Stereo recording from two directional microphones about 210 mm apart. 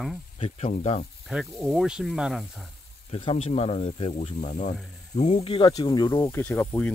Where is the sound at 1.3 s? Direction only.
Centre (ahead or behind).